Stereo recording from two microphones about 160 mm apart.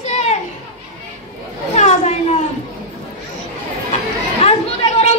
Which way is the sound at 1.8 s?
45° left (ahead or behind).